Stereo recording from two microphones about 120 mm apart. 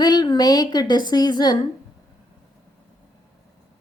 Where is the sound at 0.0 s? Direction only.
35° left (ahead or behind).